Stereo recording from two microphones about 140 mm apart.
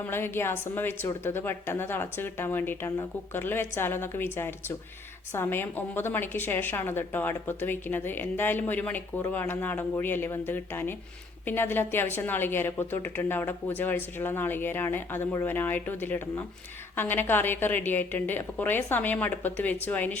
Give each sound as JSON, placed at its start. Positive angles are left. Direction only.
{"t": 0.0, "sound": "a woman's voice", "side_deg": 15}